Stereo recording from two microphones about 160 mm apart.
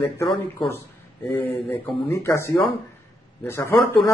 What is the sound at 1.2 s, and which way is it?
Speech, 10° left (ahead or behind).